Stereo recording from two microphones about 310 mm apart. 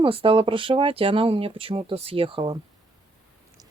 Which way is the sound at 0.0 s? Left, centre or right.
Centre.